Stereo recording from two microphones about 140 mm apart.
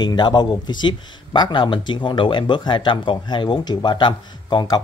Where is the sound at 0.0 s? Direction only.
30° left (ahead or behind).